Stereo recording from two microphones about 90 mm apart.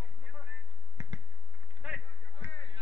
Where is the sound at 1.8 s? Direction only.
15° right (ahead or behind).